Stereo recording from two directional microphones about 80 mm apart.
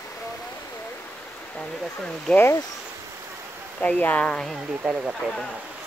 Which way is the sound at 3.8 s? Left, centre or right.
Centre.